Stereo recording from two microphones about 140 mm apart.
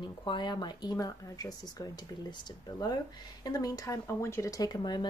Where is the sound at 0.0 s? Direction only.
35° left (ahead or behind).